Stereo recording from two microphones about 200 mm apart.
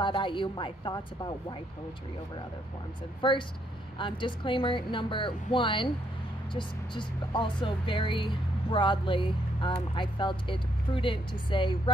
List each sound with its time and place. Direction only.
0.0 s speech: 25° left (ahead or behind)
3.2 s speech: 25° left (ahead or behind)